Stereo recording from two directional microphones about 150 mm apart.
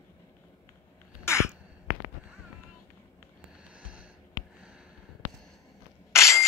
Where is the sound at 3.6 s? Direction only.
10° right (ahead or behind).